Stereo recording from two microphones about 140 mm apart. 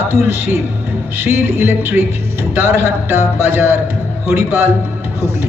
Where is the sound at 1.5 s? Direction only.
15° right (ahead or behind).